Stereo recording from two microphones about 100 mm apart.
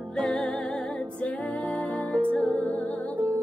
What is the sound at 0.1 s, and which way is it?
Music, 10° left (ahead or behind).